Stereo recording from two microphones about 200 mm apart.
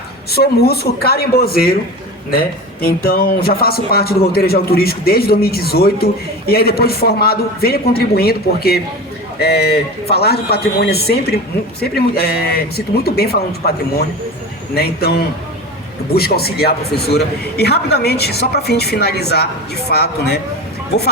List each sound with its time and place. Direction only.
0.3 s a man's voice: 50° left (ahead or behind)
15.0 s a man's voice: 50° left (ahead or behind)